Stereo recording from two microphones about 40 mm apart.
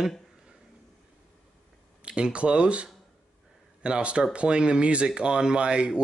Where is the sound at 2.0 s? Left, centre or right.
Right.